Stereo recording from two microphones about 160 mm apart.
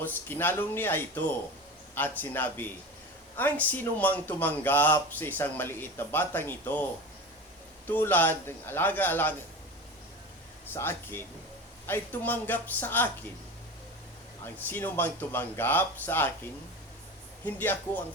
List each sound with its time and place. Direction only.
0.0 s speech: 15° left (ahead or behind)
7.9 s speech: 10° left (ahead or behind)
10.7 s speech: 15° left (ahead or behind)
14.4 s speech: 15° left (ahead or behind)